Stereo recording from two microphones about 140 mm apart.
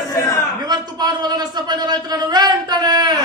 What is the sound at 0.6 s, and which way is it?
A man's voice, 30° right (ahead or behind).